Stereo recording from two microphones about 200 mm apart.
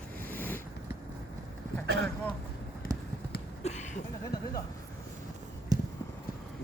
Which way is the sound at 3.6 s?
35° left (ahead or behind).